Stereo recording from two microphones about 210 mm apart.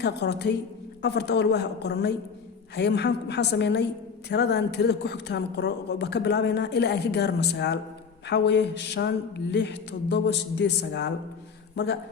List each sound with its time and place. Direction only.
0.0 s a woman's voice: 50° left (ahead or behind)